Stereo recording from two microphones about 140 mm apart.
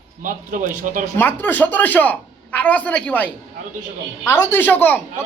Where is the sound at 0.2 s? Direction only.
70° right (ahead or behind).